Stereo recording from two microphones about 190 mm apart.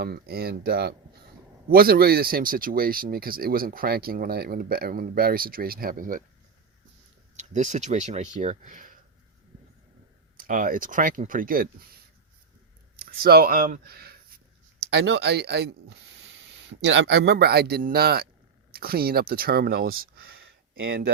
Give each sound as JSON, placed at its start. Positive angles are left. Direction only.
{"t": 0.0, "sound": "speech", "side_deg": -55}
{"t": 7.3, "sound": "speech", "side_deg": -40}
{"t": 10.3, "sound": "speech", "side_deg": -45}
{"t": 13.0, "sound": "speech", "side_deg": -50}
{"t": 14.8, "sound": "speech", "side_deg": -70}
{"t": 20.0, "sound": "speech", "side_deg": -90}
{"t": 20.4, "sound": "a sound", "side_deg": -90}